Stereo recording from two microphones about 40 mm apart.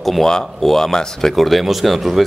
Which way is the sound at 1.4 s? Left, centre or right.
Centre.